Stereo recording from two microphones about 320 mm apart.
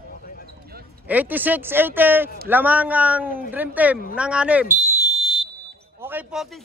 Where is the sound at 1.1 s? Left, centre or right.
Centre.